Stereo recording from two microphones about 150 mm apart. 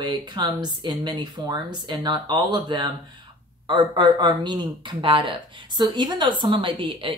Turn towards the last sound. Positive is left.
turn(degrees=-35)  # may be behind; listen again after turning